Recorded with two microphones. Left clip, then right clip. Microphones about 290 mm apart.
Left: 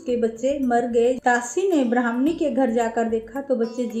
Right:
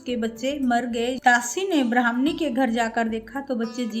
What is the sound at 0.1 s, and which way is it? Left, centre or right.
A woman's voice, right.